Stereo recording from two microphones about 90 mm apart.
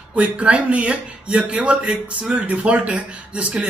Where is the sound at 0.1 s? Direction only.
15° right (ahead or behind).